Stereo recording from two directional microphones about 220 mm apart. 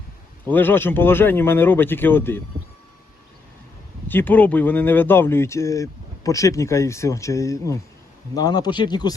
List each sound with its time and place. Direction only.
0.4 s speech: 10° left (ahead or behind)
4.1 s speech: 10° left (ahead or behind)